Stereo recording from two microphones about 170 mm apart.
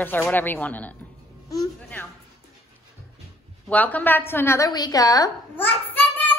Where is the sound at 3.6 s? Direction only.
10° left (ahead or behind).